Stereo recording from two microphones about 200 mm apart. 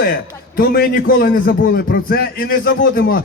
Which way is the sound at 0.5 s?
50° left (ahead or behind).